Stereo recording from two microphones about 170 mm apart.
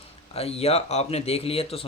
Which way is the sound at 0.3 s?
35° left (ahead or behind).